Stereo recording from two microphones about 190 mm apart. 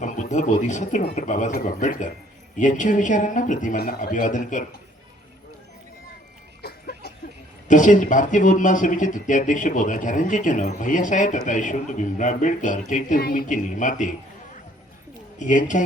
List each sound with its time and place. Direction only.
0.0 s speech: 40° left (ahead or behind)
6.6 s a sound: 55° left (ahead or behind)
7.7 s speech: 40° left (ahead or behind)
15.4 s speech: 40° left (ahead or behind)